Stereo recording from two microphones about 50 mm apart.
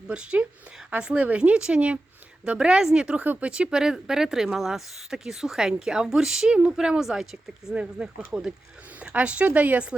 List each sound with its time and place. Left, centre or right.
0.1 s a woman's voice: right